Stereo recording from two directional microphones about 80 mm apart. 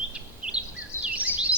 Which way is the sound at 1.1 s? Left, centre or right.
Centre.